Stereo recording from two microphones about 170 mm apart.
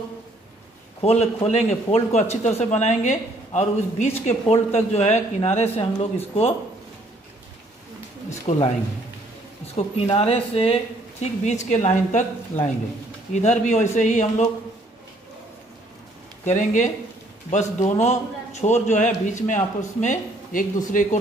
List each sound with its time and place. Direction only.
1.0 s a man's voice: 40° left (ahead or behind)
8.3 s a sound: 45° left (ahead or behind)
9.8 s a man's voice: 35° left (ahead or behind)
16.4 s a man's voice: 45° left (ahead or behind)